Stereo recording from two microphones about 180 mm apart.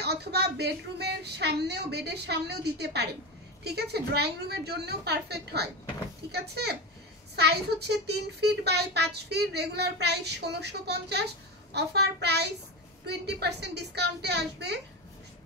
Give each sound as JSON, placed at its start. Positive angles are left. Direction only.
{"t": 0.0, "sound": "a child's voice", "side_deg": -65}